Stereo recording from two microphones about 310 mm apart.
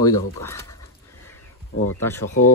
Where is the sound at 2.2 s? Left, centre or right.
Left.